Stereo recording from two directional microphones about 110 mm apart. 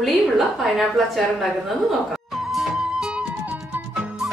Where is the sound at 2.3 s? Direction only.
Centre (ahead or behind).